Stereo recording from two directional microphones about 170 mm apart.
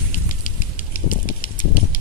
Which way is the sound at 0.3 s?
50° left (ahead or behind).